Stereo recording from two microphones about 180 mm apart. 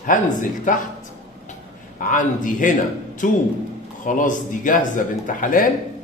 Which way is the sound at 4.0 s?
45° left (ahead or behind).